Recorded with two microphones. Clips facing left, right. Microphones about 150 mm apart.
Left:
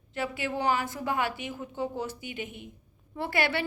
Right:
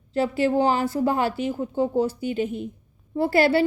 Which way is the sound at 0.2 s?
35° right (ahead or behind).